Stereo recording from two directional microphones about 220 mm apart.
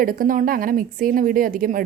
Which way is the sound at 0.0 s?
40° right (ahead or behind).